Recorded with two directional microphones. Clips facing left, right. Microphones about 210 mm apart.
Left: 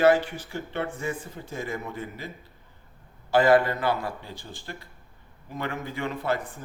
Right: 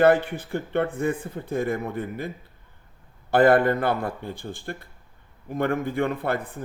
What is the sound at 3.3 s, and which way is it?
Speech, 55° right (ahead or behind).